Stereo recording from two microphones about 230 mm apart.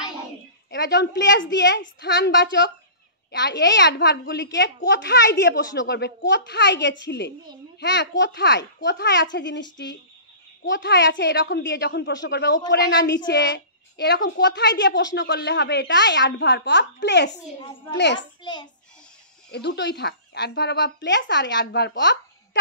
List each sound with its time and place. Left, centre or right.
0.7 s a woman's voice: left
18.4 s a child's voice: centre
19.5 s a woman's voice: left